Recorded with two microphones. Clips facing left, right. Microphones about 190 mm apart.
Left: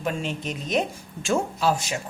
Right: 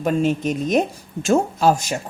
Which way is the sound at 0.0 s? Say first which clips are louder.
Right 9 dB; 45° right (ahead or behind).